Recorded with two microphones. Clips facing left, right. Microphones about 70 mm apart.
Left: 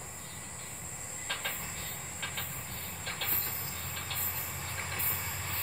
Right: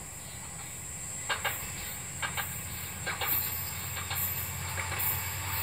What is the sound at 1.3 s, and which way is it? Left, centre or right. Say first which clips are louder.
Train: right 5 dB; right.